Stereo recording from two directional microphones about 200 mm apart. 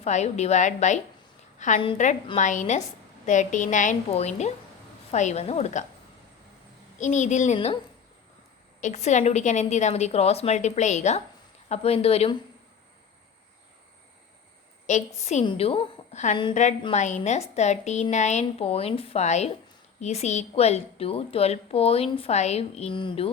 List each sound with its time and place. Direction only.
0.0 s a woman's voice: 35° left (ahead or behind)
7.0 s a woman's voice: 35° left (ahead or behind)
8.8 s a woman's voice: 35° left (ahead or behind)
14.8 s a woman's voice: 35° left (ahead or behind)